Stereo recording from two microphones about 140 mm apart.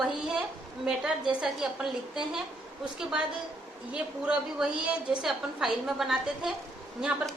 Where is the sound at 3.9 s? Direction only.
10° right (ahead or behind).